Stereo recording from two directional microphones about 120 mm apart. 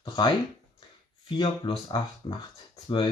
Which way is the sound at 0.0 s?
40° left (ahead or behind).